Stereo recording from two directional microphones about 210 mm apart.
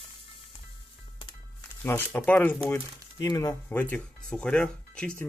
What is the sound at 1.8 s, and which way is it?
Speech, 10° left (ahead or behind).